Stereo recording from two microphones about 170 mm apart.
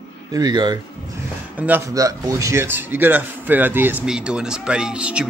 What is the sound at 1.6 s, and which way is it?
Speech, 10° right (ahead or behind).